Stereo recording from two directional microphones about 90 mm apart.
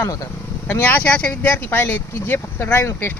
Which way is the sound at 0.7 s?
20° left (ahead or behind).